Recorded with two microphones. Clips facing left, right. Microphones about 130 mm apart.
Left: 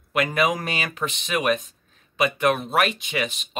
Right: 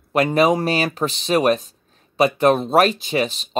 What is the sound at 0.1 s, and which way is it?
Speech, 35° right (ahead or behind).